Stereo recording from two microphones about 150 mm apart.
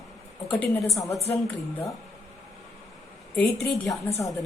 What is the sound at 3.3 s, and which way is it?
Speech, 5° left (ahead or behind).